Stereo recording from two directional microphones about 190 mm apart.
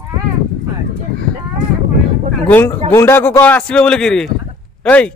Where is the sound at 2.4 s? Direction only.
10° left (ahead or behind).